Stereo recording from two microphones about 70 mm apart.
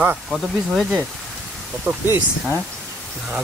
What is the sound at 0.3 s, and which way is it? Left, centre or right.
Speech, centre.